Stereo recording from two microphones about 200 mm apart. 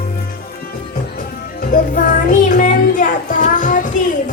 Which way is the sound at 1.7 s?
40° left (ahead or behind).